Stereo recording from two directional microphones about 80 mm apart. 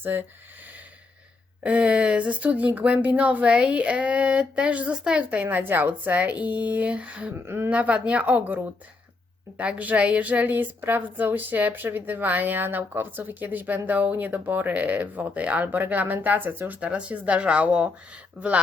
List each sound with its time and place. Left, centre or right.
0.0 s a woman's voice: right
1.6 s speech: centre
7.4 s a woman's voice: right
7.7 s a woman's voice: centre